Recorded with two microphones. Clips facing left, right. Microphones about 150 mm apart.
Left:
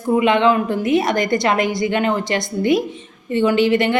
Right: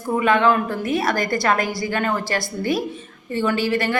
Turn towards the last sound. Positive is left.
turn(degrees=20)  # may be behind; listen again after turning